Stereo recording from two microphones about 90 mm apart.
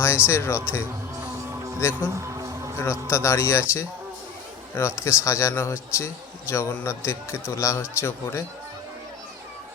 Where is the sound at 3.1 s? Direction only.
30° left (ahead or behind).